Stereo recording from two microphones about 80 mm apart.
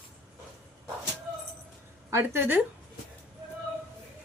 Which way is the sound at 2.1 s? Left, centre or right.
Right.